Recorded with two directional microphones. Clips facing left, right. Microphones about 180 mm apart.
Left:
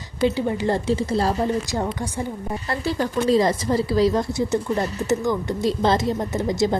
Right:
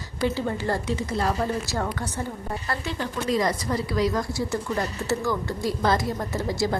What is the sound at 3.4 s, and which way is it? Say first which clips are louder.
Speech: left 5 dB; 25° left (ahead or behind).